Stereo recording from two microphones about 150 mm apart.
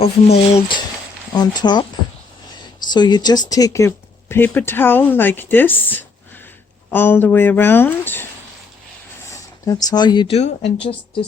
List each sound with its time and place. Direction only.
0.0 s speech: 45° left (ahead or behind)
1.4 s speech: 30° left (ahead or behind)
2.9 s speech: 30° left (ahead or behind); by 8.3 s 15° left (ahead or behind)
9.2 s a sound: 20° left (ahead or behind)
10.3 s speech: 45° left (ahead or behind)